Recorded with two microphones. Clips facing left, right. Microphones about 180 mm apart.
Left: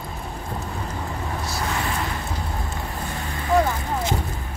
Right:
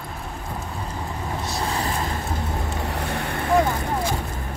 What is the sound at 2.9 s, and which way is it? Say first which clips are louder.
Vehicle: right 4 dB; 65° right (ahead or behind).